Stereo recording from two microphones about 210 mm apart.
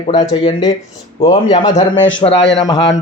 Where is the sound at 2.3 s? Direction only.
60° left (ahead or behind).